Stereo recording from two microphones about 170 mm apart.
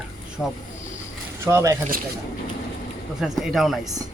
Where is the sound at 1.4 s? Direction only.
20° right (ahead or behind).